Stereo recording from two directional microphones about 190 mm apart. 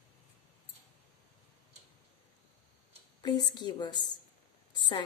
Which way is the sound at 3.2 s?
20° left (ahead or behind).